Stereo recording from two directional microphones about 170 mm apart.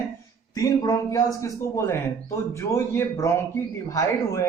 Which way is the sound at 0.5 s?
20° left (ahead or behind).